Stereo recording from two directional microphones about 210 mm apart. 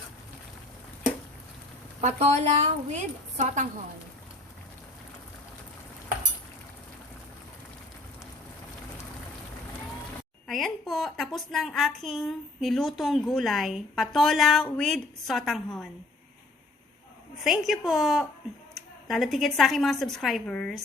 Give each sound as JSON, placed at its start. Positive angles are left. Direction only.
{"t": 2.0, "sound": "a woman's voice", "side_deg": -30}
{"t": 10.4, "sound": "a woman's voice", "side_deg": 0}
{"t": 17.7, "sound": "a woman's voice", "side_deg": 0}